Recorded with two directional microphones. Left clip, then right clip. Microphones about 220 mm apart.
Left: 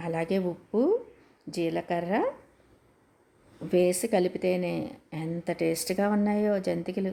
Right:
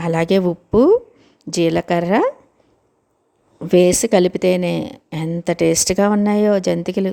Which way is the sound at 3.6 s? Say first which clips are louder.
Right 11 dB; 35° right (ahead or behind).